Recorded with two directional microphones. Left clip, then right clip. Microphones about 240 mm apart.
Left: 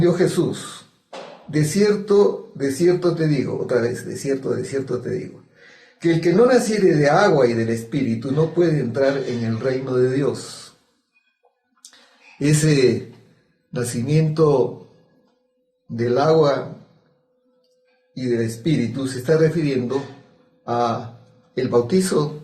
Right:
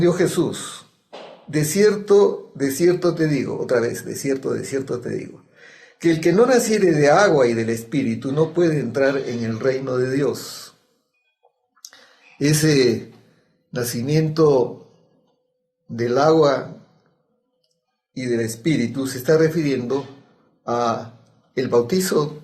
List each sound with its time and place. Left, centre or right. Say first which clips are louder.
0.0 s speech: even; right
6.0 s speech: even; right
12.4 s speech: right 1 dB; right
13.7 s speech: right 1 dB; right
16.0 s speech: right 1 dB; right
18.1 s speech: even; right